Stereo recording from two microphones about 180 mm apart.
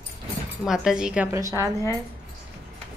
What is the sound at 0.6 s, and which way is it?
Speech, 5° right (ahead or behind).